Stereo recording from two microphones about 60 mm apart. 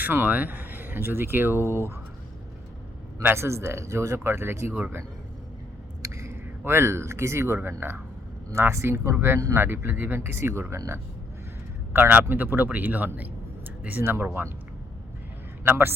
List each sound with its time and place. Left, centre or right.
0.0 s speech: right
3.2 s speech: right
6.0 s whispering: right
6.7 s speech: right
11.9 s a man's voice: right
15.6 s speech: right